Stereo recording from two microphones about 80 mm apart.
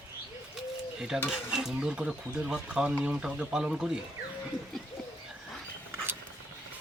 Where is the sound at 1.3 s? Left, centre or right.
Centre.